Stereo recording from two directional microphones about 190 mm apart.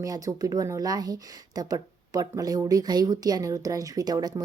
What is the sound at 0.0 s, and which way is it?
Speech, 20° right (ahead or behind).